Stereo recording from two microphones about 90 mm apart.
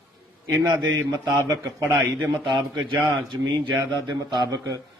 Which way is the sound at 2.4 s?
55° right (ahead or behind).